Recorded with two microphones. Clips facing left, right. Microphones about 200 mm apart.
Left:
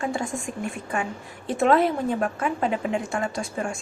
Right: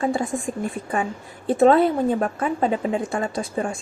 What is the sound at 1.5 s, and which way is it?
A woman's voice, 30° right (ahead or behind).